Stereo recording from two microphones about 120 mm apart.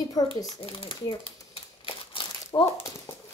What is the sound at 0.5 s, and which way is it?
Speech, 45° left (ahead or behind).